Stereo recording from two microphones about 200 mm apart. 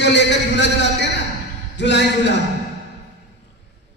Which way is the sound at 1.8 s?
60° left (ahead or behind).